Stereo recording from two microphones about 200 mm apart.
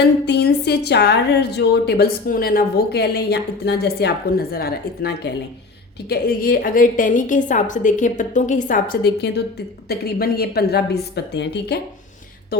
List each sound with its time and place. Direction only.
0.0 s a woman's voice: 55° left (ahead or behind)